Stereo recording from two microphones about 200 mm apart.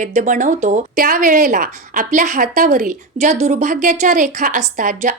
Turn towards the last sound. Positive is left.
turn(degrees=-40)  # may be behind; listen again after turning